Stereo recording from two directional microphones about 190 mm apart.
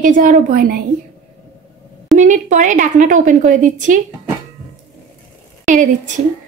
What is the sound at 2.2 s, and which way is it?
A woman's voice, 40° right (ahead or behind).